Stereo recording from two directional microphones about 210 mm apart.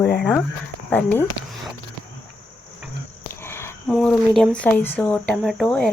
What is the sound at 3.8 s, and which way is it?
Speech, centre (ahead or behind).